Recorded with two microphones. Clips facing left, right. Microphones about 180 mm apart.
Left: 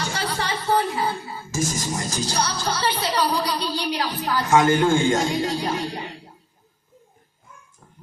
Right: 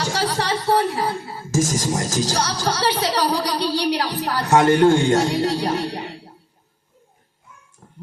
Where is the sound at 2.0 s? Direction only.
90° right.